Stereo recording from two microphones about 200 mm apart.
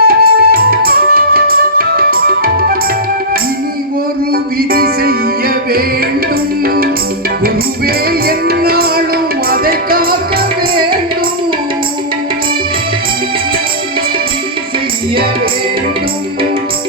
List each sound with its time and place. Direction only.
0.0 s music: 50° right (ahead or behind)
4.3 s music: 50° right (ahead or behind)
8.3 s music: 50° right (ahead or behind)